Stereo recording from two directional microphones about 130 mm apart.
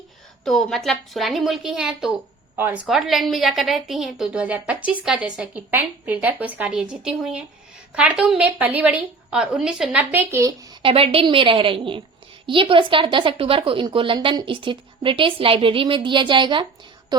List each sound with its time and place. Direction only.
0.4 s a woman's voice: 5° left (ahead or behind); by 2.8 s 15° right (ahead or behind)
2.8 s a woman's voice: centre (ahead or behind); by 10.8 s 25° right (ahead or behind)
10.8 s a woman's voice: 45° right (ahead or behind); by 17.3 s 30° right (ahead or behind)